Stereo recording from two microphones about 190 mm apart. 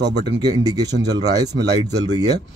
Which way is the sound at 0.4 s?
20° right (ahead or behind).